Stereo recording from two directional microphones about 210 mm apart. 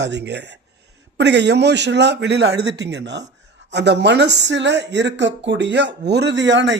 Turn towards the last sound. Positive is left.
turn(degrees=-60)  # may be behind; listen again after turning